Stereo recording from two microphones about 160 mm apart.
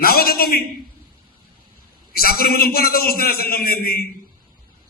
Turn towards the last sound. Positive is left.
turn(degrees=70)  # may be behind; listen again after turning